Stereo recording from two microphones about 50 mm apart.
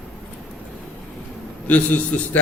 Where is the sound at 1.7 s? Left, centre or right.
Left.